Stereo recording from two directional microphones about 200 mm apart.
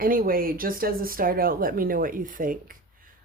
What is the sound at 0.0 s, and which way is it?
Speech, 45° right (ahead or behind).